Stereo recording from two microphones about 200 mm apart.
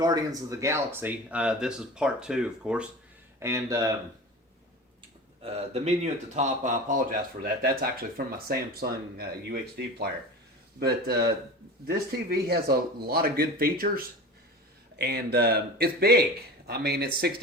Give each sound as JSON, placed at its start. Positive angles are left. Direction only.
{"t": 0.0, "sound": "speech", "side_deg": -20}
{"t": 3.4, "sound": "speech", "side_deg": -15}
{"t": 5.4, "sound": "speech", "side_deg": -30}